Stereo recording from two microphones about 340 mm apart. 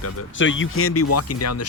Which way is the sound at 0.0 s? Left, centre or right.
Left.